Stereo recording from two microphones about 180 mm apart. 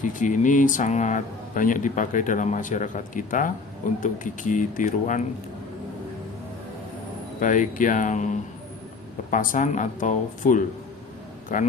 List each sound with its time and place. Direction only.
0.0 s speech: 45° left (ahead or behind)
7.3 s speech: 45° left (ahead or behind)